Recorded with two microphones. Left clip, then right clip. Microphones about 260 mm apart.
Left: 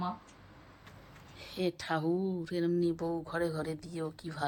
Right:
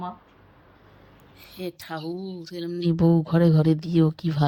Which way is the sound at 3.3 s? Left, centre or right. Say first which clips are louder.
Right 12 dB; right.